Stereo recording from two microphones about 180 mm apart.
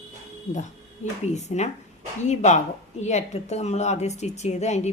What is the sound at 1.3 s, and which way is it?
A woman's voice, 40° left (ahead or behind).